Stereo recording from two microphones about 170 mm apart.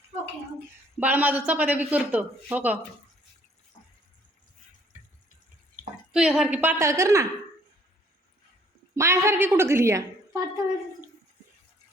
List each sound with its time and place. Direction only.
0.9 s a woman's voice: 10° right (ahead or behind)
6.1 s a woman's voice: 5° right (ahead or behind)
9.0 s a woman's voice: 15° right (ahead or behind)